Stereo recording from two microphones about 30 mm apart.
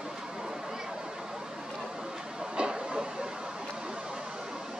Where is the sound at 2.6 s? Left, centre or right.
Right.